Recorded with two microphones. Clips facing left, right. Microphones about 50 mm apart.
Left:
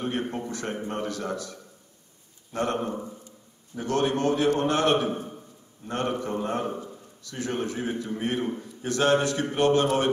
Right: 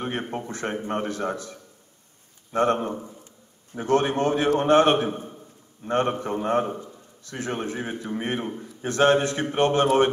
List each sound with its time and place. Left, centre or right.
0.5 s a man's voice: right